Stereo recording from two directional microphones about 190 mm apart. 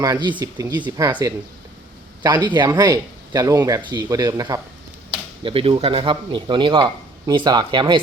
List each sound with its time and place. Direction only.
0.0 s speech: 20° right (ahead or behind)